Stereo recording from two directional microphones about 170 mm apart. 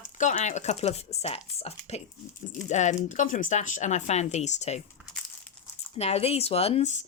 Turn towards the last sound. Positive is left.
turn(degrees=40)  # may be behind; listen again after turning